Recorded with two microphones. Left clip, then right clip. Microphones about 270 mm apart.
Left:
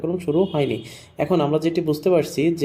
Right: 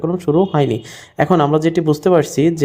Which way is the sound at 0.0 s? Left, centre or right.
Right.